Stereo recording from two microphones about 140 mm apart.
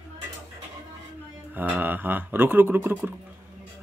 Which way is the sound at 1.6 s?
15° right (ahead or behind).